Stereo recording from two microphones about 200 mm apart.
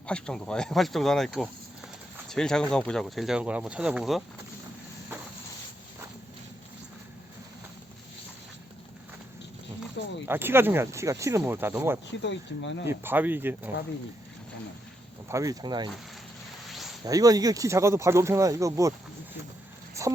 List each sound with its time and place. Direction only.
0.1 s speech: 5° left (ahead or behind)
10.2 s speech: 10° right (ahead or behind)
12.2 s speech: 65° left (ahead or behind)
12.8 s speech: 10° right (ahead or behind)
15.3 s speech: 15° right (ahead or behind)
16.6 s a sound: centre (ahead or behind)
17.1 s speech: 20° right (ahead or behind)